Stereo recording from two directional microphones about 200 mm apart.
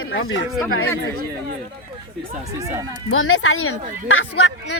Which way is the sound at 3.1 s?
90° left.